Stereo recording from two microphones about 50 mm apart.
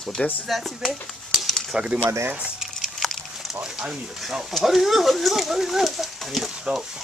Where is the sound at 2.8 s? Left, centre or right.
Centre.